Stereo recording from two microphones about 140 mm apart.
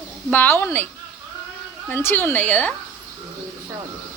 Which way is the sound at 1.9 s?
15° left (ahead or behind).